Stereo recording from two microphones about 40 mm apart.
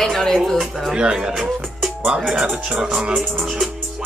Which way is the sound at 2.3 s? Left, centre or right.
Centre.